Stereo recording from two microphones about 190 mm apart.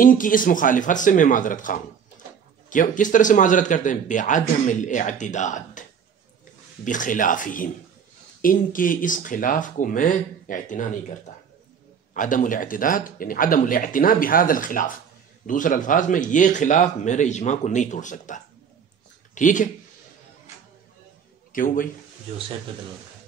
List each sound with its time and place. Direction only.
0.0 s speech: 45° left (ahead or behind)
21.5 s a man's voice: 45° left (ahead or behind)